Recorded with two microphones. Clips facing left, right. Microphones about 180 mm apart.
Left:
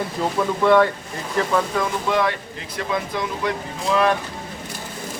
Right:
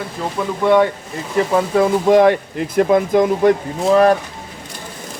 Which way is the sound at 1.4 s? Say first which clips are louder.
Right 6 dB; 30° right (ahead or behind).